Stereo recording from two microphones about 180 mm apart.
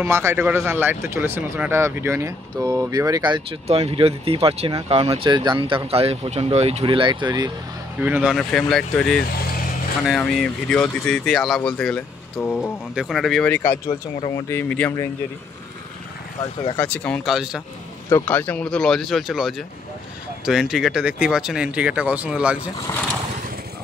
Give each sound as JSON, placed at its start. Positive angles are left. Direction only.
{"t": 0.0, "sound": "speech", "side_deg": -15}
{"t": 8.0, "sound": "speech", "side_deg": -5}
{"t": 16.7, "sound": "speech", "side_deg": 10}
{"t": 17.2, "sound": "speech", "side_deg": 0}
{"t": 18.1, "sound": "speech", "side_deg": 10}